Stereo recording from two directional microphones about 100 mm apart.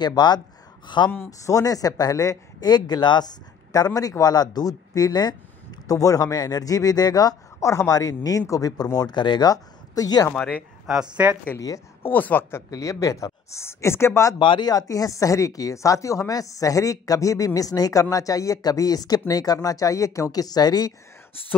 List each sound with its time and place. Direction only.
0.0 s speech: 45° left (ahead or behind)
1.4 s speech: 35° left (ahead or behind)
10.3 s speech: 15° left (ahead or behind)
11.2 s speech: 20° right (ahead or behind)
11.5 s speech: 35° left (ahead or behind)
12.0 s a woman's voice: 20° left (ahead or behind)
12.7 s speech: 35° left (ahead or behind)
14.4 s speech: 55° left (ahead or behind)
14.7 s speech: 35° left (ahead or behind)